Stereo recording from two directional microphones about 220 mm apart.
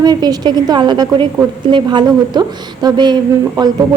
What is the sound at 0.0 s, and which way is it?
A woman's voice, 20° right (ahead or behind).